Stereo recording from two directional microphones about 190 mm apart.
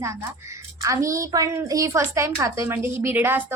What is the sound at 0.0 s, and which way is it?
A woman's voice, 15° right (ahead or behind).